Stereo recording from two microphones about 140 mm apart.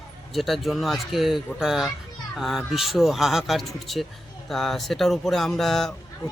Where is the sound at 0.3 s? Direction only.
Centre (ahead or behind).